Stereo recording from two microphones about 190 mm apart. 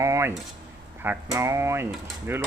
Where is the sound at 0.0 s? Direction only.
15° right (ahead or behind).